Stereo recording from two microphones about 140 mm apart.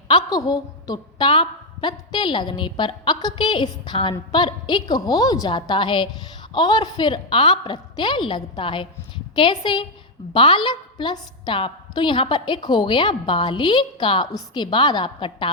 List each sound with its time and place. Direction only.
0.1 s a woman's voice: 30° left (ahead or behind)